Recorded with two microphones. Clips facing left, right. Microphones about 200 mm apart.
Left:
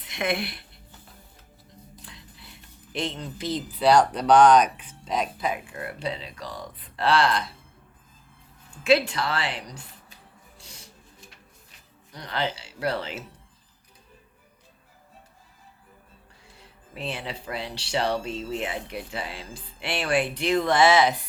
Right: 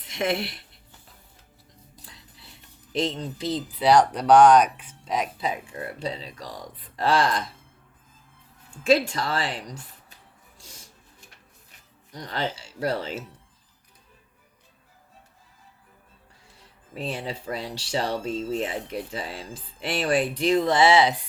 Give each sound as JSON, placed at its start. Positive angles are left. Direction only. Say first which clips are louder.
{"t": 2.0, "sound": "a sound", "louder": "left 3 dB", "side_deg": -35}
{"t": 3.8, "sound": "speech", "louder": "even", "side_deg": -15}
{"t": 5.4, "sound": "speech", "louder": "even", "side_deg": -35}
{"t": 8.9, "sound": "speech", "louder": "even", "side_deg": -45}
{"t": 10.6, "sound": "a sound", "louder": "even", "side_deg": -45}
{"t": 12.1, "sound": "speech", "louder": "even", "side_deg": -45}
{"t": 16.9, "sound": "speech", "louder": "right 2 dB", "side_deg": -40}